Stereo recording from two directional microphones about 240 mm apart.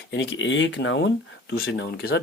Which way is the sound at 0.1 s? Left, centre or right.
Left.